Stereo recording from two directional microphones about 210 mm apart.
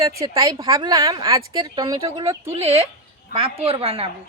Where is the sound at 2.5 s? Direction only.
30° right (ahead or behind).